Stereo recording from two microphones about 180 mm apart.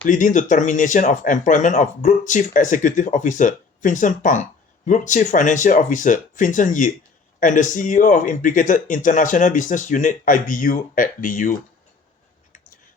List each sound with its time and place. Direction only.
0.0 s speech: 45° left (ahead or behind)